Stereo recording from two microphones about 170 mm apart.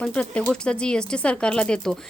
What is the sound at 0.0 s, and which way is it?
Speech, 5° left (ahead or behind).